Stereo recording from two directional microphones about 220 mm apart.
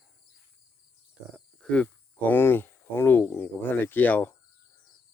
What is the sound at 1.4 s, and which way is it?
Speech, 5° left (ahead or behind).